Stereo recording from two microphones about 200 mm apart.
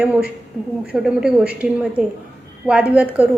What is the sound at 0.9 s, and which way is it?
A woman's voice, 5° right (ahead or behind).